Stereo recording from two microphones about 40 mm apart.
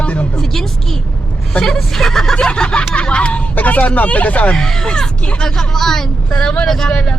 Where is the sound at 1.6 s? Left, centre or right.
Centre.